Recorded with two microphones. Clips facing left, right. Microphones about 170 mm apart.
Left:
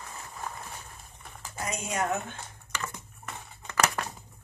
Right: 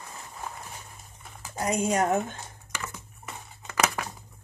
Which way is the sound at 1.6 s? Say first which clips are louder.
Right 6 dB; 45° right (ahead or behind).